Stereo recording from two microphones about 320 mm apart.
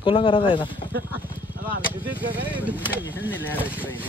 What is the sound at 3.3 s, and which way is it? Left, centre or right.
Speech, centre.